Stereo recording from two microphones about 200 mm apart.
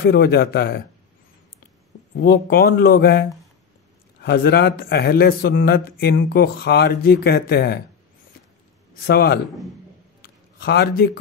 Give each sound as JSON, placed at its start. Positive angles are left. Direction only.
{"t": 0.0, "sound": "a man's voice", "side_deg": 50}
{"t": 2.1, "sound": "a man's voice", "side_deg": 50}
{"t": 9.0, "sound": "a man's voice", "side_deg": 50}
{"t": 10.2, "sound": "a sound", "side_deg": 50}